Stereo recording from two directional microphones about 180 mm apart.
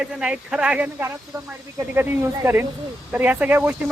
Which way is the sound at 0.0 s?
5° right (ahead or behind).